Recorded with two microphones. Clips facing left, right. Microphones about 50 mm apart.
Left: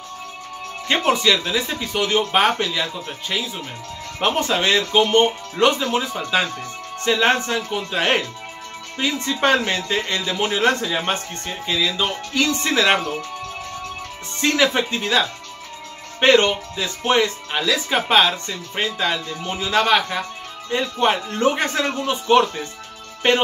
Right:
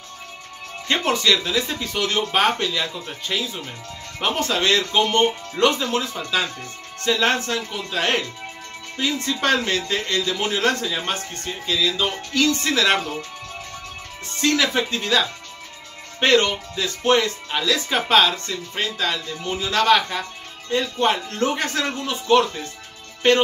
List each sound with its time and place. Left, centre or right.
0.8 s speech: centre
14.4 s speech: left